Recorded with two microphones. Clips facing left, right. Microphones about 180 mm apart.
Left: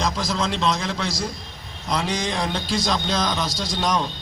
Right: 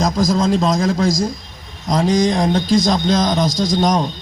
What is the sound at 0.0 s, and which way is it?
A man's voice, 45° right (ahead or behind).